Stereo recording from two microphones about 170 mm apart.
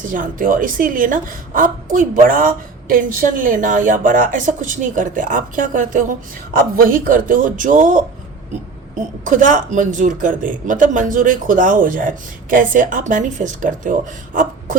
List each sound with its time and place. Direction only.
0.0 s a woman's voice: 50° right (ahead or behind)
9.2 s a woman's voice: 50° right (ahead or behind)